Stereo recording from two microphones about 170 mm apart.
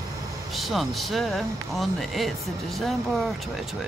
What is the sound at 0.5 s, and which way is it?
Speech, centre (ahead or behind).